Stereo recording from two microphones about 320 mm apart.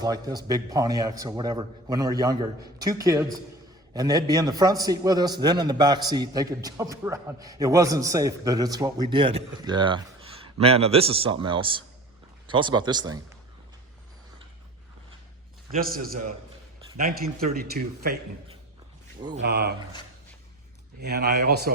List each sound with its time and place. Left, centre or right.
0.0 s a man's voice: centre
15.7 s speech: right
19.3 s speech: right
21.0 s speech: right